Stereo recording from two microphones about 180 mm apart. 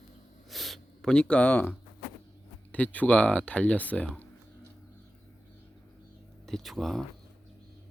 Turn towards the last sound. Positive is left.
turn(degrees=0)  # may be behind; listen again after turning